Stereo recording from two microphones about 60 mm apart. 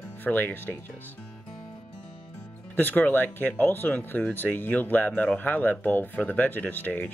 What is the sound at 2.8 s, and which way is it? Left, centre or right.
Speech, left.